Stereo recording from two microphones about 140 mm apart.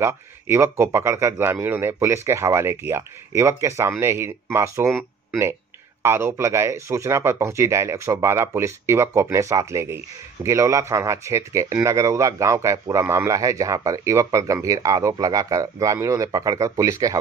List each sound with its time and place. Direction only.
0.0 s speech: 20° right (ahead or behind)
6.0 s speech: 20° right (ahead or behind)